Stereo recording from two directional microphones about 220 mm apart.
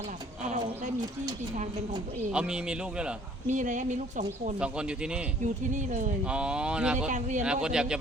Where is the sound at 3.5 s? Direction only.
35° right (ahead or behind).